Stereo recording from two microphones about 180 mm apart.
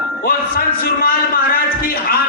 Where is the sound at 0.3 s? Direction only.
55° left (ahead or behind).